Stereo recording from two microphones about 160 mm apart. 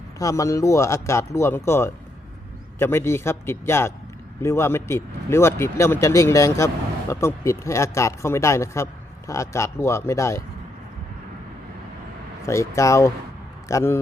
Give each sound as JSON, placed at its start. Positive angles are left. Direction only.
{"t": 0.2, "sound": "speech", "side_deg": 20}
{"t": 12.5, "sound": "speech", "side_deg": 20}